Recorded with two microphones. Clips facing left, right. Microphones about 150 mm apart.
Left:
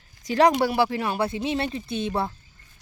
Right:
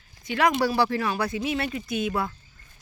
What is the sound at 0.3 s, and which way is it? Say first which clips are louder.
Speech: left 4 dB; 35° left (ahead or behind).